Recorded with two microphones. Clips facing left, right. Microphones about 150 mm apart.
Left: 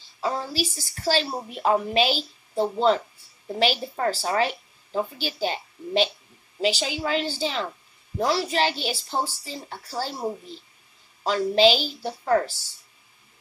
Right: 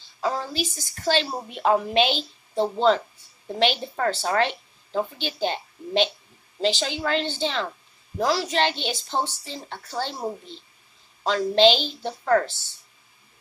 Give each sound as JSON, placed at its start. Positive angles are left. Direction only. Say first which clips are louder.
{"t": 0.2, "sound": "a woman's voice", "louder": "even", "side_deg": 5}
{"t": 12.4, "sound": "speech", "louder": "right 1 dB", "side_deg": 35}